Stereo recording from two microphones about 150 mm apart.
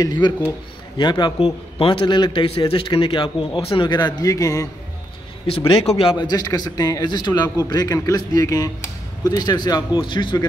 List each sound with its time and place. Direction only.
0.0 s a man's voice: 25° left (ahead or behind)
5.9 s a man's voice: 35° left (ahead or behind)